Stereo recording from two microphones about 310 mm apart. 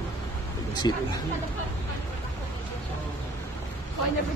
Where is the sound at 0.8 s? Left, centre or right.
Centre.